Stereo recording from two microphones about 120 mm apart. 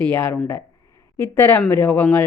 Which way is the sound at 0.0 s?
15° left (ahead or behind).